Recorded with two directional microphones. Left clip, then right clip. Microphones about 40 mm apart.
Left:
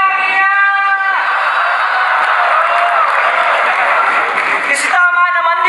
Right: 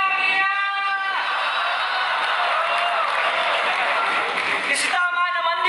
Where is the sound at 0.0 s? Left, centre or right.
Left.